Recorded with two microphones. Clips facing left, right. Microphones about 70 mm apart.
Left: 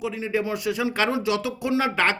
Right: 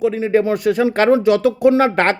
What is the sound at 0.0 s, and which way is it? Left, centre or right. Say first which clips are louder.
Speech: right 10 dB; right.